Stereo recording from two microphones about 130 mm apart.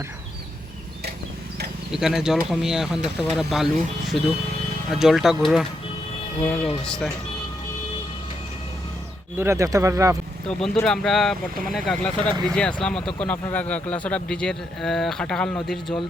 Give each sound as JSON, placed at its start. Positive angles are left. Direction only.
{"t": 1.9, "sound": "speech", "side_deg": -5}
{"t": 6.4, "sound": "speech", "side_deg": 10}
{"t": 9.4, "sound": "speech", "side_deg": -20}
{"t": 10.8, "sound": "speech", "side_deg": 5}